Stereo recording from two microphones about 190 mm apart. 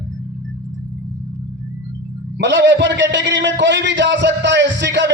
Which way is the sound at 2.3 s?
65° right (ahead or behind).